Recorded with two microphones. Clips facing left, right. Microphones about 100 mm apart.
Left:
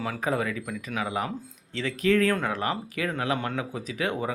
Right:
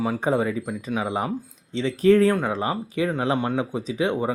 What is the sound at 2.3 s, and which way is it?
Speech, 20° right (ahead or behind).